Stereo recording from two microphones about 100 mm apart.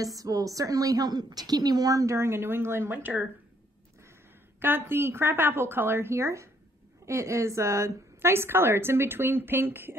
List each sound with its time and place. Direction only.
0.0 s a woman's voice: 35° right (ahead or behind); by 3.3 s 20° right (ahead or behind)
4.6 s a woman's voice: 20° right (ahead or behind)